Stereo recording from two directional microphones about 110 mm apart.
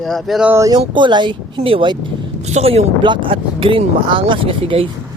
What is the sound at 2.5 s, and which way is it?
Speech, 70° right (ahead or behind).